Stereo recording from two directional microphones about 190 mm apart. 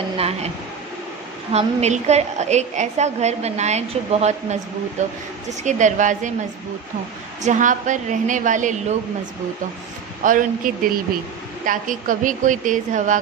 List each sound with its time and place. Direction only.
1.5 s a woman's voice: 35° right (ahead or behind)
7.4 s a woman's voice: 40° right (ahead or behind)
10.2 s a woman's voice: 45° right (ahead or behind)